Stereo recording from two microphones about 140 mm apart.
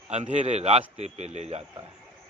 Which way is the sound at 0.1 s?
50° right (ahead or behind).